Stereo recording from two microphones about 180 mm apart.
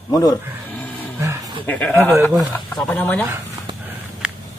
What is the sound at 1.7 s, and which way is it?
Speech, 10° left (ahead or behind).